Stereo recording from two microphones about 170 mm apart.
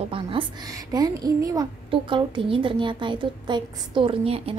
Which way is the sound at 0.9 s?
20° right (ahead or behind).